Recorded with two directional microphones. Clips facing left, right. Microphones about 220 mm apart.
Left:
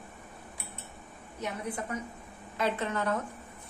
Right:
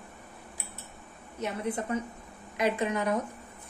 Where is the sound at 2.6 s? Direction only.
15° right (ahead or behind).